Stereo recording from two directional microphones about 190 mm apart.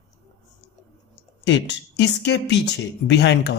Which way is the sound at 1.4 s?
70° left (ahead or behind).